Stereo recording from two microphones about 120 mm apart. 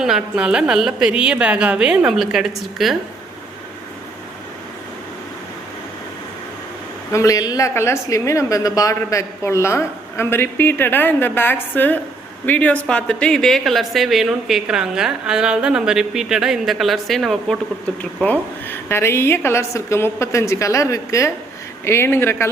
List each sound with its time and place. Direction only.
0.0 s a woman's voice: 5° right (ahead or behind)
7.1 s a woman's voice: 25° left (ahead or behind); by 17.6 s centre (ahead or behind)
18.7 s a woman's voice: 20° left (ahead or behind)